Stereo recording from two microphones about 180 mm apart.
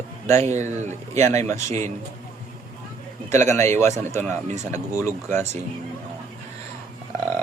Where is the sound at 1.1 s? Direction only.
40° right (ahead or behind).